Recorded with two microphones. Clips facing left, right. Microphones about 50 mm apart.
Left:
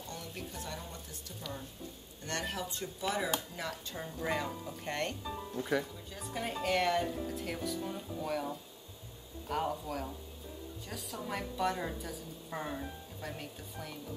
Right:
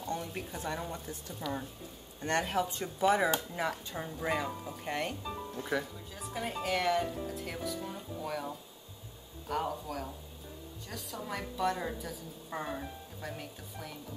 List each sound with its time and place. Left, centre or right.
0.1 s speech: right
2.2 s speech: right
3.5 s a woman's voice: centre